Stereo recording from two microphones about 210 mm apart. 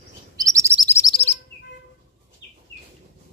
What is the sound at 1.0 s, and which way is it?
Chirp, 30° left (ahead or behind).